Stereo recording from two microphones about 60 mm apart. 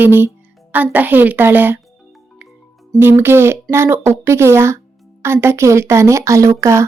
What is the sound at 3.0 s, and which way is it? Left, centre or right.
Speech, right.